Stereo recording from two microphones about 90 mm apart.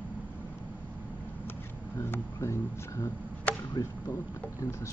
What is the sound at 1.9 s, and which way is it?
Speech, 30° left (ahead or behind).